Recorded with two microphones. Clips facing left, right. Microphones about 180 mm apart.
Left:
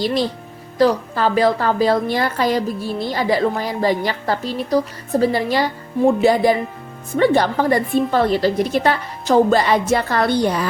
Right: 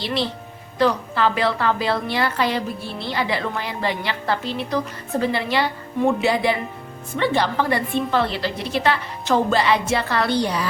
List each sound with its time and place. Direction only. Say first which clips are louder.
0.0 s a woman's voice: left 5 dB; 45° left (ahead or behind)